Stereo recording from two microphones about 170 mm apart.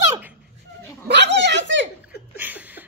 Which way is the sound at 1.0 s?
90° right.